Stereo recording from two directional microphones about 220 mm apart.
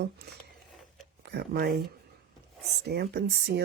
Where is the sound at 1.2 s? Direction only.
50° right (ahead or behind).